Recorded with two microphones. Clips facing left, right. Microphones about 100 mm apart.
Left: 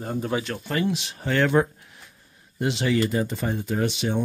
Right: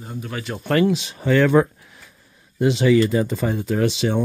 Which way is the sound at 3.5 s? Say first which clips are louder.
Right 4 dB; 90° right.